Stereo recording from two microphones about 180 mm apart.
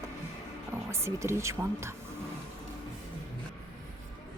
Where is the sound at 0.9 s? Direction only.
15° right (ahead or behind).